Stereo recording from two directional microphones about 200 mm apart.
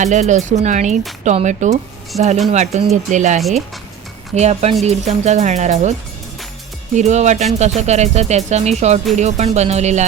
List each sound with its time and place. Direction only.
0.0 s speech: 35° right (ahead or behind)
6.9 s speech: 35° right (ahead or behind)